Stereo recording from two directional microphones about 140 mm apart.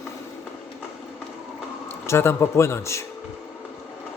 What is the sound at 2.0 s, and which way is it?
Speech, 20° left (ahead or behind).